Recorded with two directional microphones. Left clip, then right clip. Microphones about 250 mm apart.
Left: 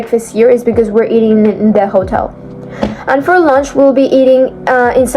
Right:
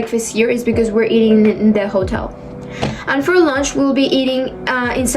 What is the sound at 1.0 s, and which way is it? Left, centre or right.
A woman's voice, centre.